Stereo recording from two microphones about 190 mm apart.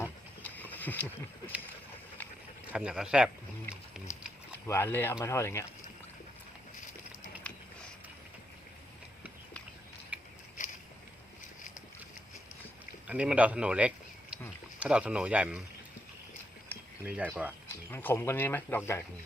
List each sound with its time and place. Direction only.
0.0 s a sound: 10° left (ahead or behind)
2.7 s speech: 5° right (ahead or behind)
4.1 s a sound: 40° left (ahead or behind)
4.6 s speech: 10° left (ahead or behind)
10.1 s patter: 5° right (ahead or behind)
13.1 s speech: 5° right (ahead or behind)
17.1 s speech: 5° right (ahead or behind)
17.9 s speech: 15° left (ahead or behind)